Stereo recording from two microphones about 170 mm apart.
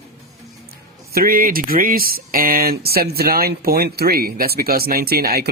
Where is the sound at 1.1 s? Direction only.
60° right (ahead or behind).